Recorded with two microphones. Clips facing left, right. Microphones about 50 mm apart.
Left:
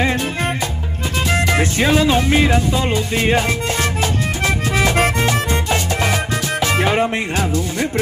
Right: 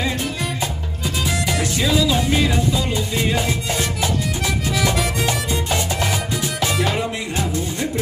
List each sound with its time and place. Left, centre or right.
0.0 s music: left